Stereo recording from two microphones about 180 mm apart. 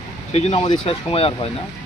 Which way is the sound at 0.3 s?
40° left (ahead or behind).